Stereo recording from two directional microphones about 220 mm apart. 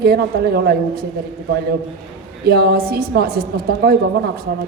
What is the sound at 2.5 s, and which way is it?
Mantra, 45° right (ahead or behind).